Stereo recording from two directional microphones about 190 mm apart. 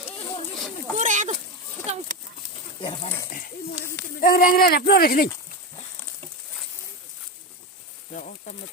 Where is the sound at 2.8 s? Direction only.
30° left (ahead or behind).